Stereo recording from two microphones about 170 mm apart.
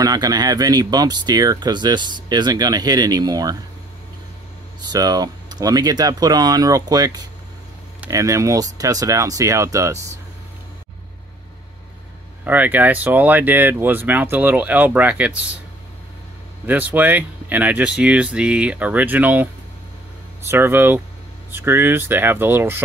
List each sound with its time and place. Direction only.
0.0 s speech: 20° right (ahead or behind)
4.8 s speech: 25° right (ahead or behind)
12.4 s speech: 10° right (ahead or behind)
16.6 s speech: 10° right (ahead or behind)